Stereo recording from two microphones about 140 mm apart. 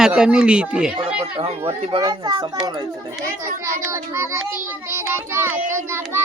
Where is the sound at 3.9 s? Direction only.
15° right (ahead or behind).